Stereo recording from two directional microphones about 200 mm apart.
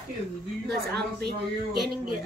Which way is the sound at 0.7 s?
55° right (ahead or behind).